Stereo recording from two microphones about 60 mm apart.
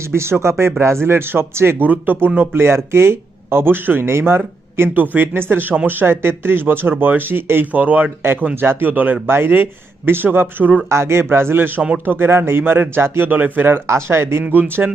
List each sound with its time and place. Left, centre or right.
0.0 s a man's voice: right
7.7 s speech: right
10.8 s a man's voice: right
13.8 s a man's voice: right
14.4 s speech: right